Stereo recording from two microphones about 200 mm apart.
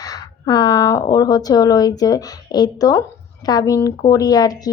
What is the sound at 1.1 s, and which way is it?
A woman's voice, 20° left (ahead or behind).